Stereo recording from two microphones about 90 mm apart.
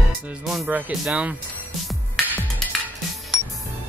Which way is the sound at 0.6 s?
15° right (ahead or behind).